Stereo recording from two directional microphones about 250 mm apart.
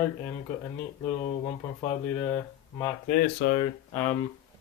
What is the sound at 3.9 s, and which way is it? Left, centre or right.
Speech, centre.